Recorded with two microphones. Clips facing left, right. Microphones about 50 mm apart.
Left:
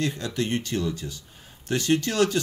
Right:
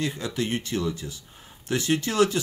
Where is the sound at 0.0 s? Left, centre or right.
Right.